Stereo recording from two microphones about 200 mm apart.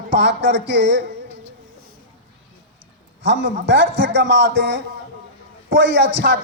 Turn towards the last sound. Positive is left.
turn(degrees=-60)  # may be behind; listen again after turning